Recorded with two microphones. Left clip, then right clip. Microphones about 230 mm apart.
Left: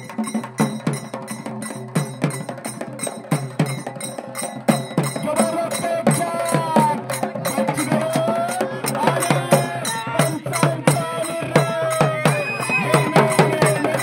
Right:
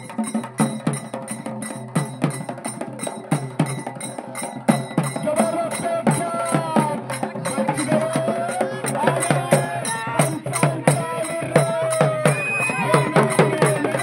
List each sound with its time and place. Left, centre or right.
0.2 s music: centre
2.0 s music: left
3.3 s music: left